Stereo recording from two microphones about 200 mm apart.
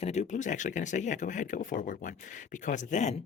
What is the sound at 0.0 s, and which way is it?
Speech, 35° left (ahead or behind).